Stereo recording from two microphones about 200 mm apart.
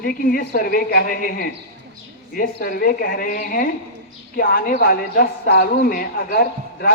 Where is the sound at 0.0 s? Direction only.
45° left (ahead or behind).